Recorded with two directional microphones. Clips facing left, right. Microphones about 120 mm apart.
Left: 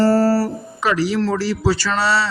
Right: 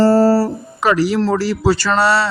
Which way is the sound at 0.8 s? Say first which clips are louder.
Right 3 dB; 50° right (ahead or behind).